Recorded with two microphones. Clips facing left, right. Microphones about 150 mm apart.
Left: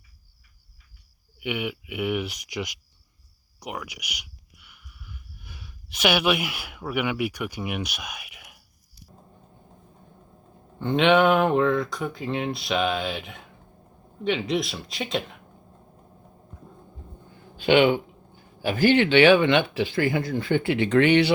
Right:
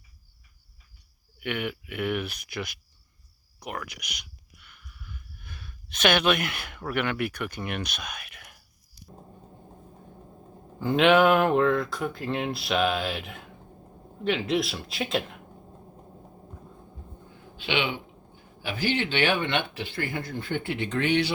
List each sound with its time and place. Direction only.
1.4 s speech: 15° left (ahead or behind)
3.6 s a sound: 10° left (ahead or behind)
10.8 s speech: centre (ahead or behind)
17.6 s speech: 45° left (ahead or behind); by 21.3 s 65° left (ahead or behind)